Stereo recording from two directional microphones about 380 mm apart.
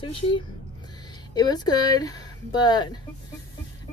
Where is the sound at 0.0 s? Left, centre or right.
Centre.